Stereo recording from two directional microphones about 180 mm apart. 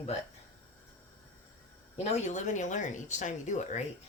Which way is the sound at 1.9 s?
40° left (ahead or behind).